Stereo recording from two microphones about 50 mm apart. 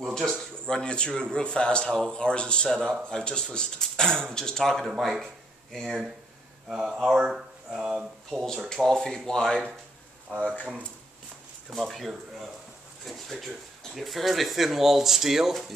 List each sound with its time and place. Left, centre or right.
0.1 s speech: centre
2.7 s speech: centre
5.2 s a sound: centre
5.9 s speech: centre
8.6 s speech: centre
10.4 s speech: left
11.7 s speech: centre